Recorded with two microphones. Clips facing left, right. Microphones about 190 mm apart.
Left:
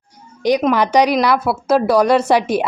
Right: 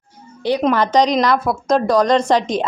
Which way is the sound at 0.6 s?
10° left (ahead or behind).